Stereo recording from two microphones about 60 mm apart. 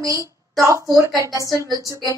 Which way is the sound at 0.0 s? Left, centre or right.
Right.